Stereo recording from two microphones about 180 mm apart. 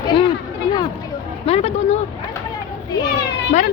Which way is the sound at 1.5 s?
35° left (ahead or behind).